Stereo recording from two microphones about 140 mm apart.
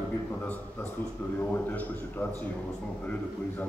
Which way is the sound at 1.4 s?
10° left (ahead or behind).